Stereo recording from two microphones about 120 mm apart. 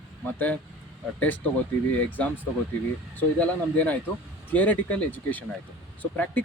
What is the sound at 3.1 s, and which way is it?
Speech, 15° left (ahead or behind).